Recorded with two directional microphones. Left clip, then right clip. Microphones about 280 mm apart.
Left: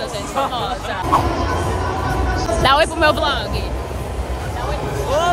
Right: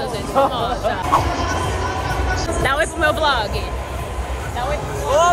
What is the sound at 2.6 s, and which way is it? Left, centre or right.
Speech, centre.